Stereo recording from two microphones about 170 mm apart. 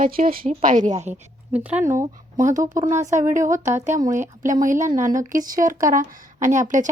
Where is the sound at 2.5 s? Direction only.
50° right (ahead or behind).